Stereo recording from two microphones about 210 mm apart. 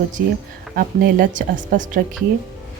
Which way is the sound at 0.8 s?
40° right (ahead or behind).